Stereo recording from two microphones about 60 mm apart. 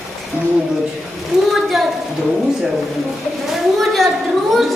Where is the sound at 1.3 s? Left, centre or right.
Centre.